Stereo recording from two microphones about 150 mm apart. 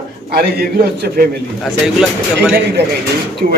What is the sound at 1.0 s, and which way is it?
Speech, 90° right.